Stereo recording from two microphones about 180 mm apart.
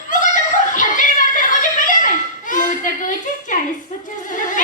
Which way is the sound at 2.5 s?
45° left (ahead or behind).